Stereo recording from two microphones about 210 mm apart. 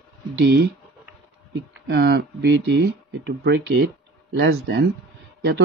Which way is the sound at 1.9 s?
50° right (ahead or behind).